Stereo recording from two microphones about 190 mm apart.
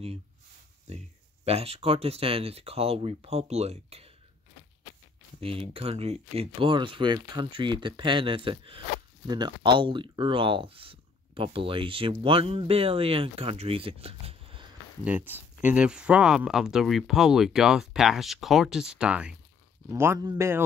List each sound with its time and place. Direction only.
0.8 s speech: 35° right (ahead or behind)
5.4 s speech: 30° right (ahead or behind)
15.0 s a man's voice: 10° right (ahead or behind)